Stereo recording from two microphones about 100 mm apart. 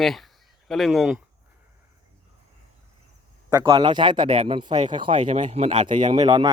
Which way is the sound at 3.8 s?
50° right (ahead or behind).